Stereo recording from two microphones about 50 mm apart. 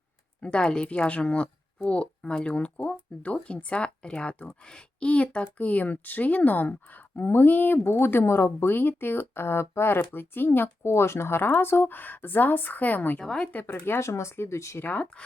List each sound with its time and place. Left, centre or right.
0.4 s a woman's voice: centre; by 13.2 s left
13.2 s speech: centre
13.7 s speech: left
14.1 s speech: left
14.8 s speech: left